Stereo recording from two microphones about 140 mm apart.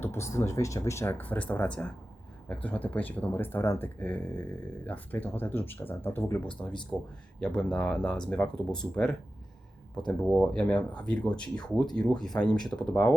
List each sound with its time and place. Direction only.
0.0 s speech: 20° left (ahead or behind)